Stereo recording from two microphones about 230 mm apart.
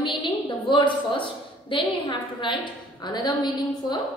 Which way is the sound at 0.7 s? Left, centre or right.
Left.